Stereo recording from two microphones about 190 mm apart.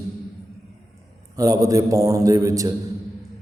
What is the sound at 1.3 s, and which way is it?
A man's voice, 20° right (ahead or behind).